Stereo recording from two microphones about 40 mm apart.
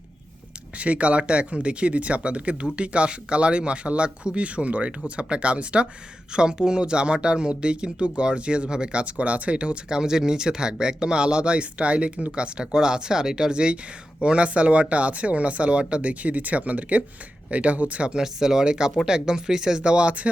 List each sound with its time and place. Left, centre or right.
0.8 s speech: right
10.0 s speech: centre; by 18.1 s right
18.1 s speech: centre; by 20.3 s right